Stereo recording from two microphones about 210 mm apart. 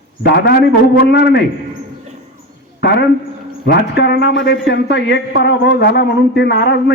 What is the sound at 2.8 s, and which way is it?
A woman's voice, 50° left (ahead or behind).